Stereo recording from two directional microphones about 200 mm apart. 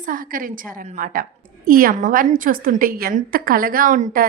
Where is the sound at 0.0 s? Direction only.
45° right (ahead or behind).